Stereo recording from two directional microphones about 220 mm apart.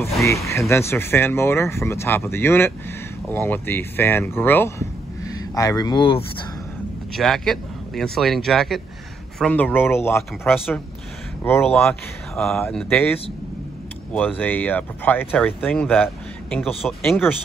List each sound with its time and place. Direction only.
0.5 s speech: 15° left (ahead or behind)
7.2 s speech: centre (ahead or behind)
10.5 s speech: centre (ahead or behind)